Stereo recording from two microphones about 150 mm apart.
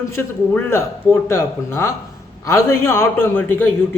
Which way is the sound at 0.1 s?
15° left (ahead or behind).